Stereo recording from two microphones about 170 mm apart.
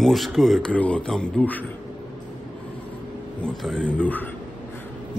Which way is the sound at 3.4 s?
5° left (ahead or behind).